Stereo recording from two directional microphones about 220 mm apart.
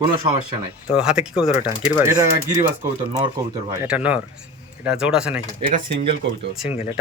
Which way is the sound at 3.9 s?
5° right (ahead or behind).